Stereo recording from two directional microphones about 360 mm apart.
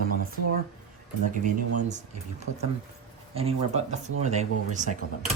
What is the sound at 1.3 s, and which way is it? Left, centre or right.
Speech, right.